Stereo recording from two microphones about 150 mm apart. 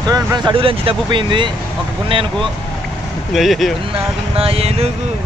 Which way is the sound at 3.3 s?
Centre (ahead or behind).